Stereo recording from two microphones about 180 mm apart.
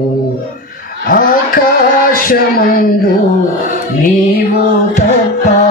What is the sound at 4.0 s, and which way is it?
Mantra, 50° left (ahead or behind).